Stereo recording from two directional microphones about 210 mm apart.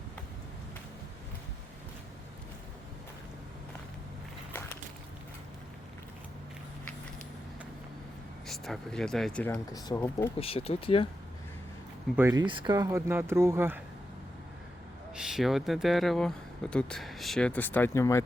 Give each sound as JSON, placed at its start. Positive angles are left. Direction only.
{"t": 8.4, "sound": "speech", "side_deg": 0}
{"t": 10.4, "sound": "speech", "side_deg": 25}
{"t": 12.1, "sound": "speech", "side_deg": -15}
{"t": 15.2, "sound": "speech", "side_deg": 0}